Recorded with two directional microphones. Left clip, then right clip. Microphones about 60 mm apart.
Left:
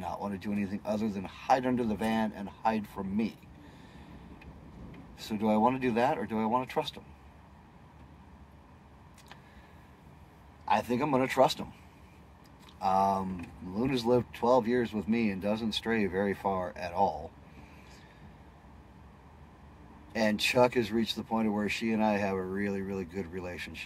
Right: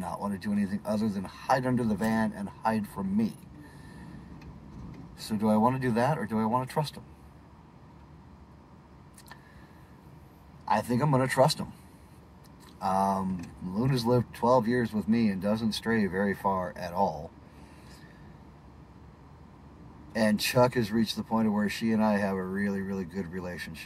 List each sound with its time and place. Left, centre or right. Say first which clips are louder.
0.0 s speech: right 2 dB; centre; by 3.0 s left
5.2 s speech: right 1 dB; left
10.6 s speech: right 1 dB; left
12.7 s speech: even; centre
20.1 s speech: right 1 dB; centre